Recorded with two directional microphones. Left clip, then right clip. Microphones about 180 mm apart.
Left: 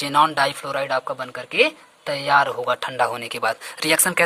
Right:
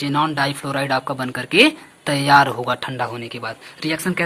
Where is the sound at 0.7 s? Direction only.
20° left (ahead or behind).